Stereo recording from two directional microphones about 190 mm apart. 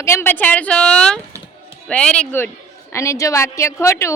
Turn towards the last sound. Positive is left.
turn(degrees=15)  # may be behind; listen again after turning